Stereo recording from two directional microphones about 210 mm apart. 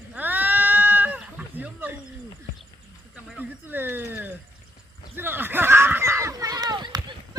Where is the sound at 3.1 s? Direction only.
5° right (ahead or behind).